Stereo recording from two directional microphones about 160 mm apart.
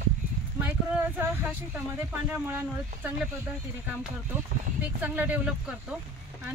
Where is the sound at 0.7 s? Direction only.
15° right (ahead or behind).